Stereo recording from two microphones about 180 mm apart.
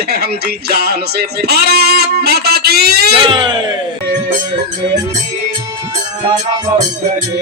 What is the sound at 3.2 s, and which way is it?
Speech, 25° right (ahead or behind).